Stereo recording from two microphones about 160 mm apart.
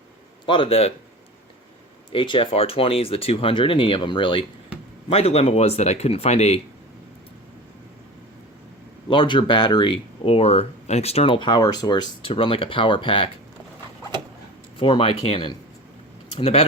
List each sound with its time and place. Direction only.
0.4 s speech: 30° left (ahead or behind)
2.1 s speech: 30° left (ahead or behind)
9.0 s speech: 30° left (ahead or behind)
14.8 s speech: 35° left (ahead or behind)